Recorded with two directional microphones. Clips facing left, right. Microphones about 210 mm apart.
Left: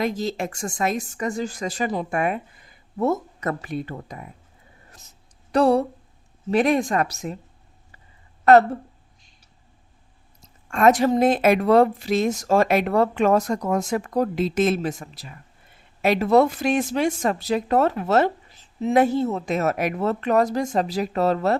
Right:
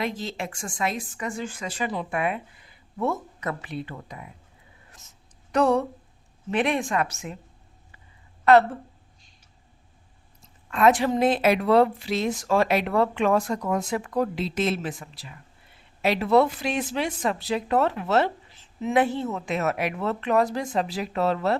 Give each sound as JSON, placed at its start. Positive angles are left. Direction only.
{"t": 0.0, "sound": "a woman's voice", "side_deg": 40}
{"t": 4.9, "sound": "a sound", "side_deg": 35}
{"t": 6.5, "sound": "speech", "side_deg": 40}
{"t": 8.4, "sound": "a woman's voice", "side_deg": 45}
{"t": 10.4, "sound": "a woman's voice", "side_deg": 45}